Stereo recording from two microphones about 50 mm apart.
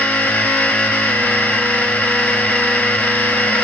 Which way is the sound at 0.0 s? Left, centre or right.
Left.